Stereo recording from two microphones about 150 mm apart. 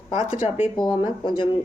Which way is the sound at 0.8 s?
30° left (ahead or behind).